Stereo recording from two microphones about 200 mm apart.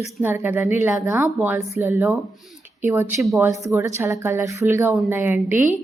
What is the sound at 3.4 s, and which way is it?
Speech, 15° right (ahead or behind).